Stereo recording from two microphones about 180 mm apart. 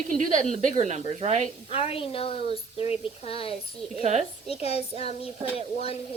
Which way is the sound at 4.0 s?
40° right (ahead or behind).